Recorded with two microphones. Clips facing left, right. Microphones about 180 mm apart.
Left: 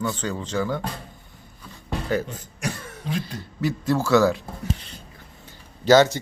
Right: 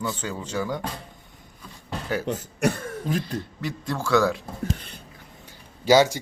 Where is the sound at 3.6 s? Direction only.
5° left (ahead or behind).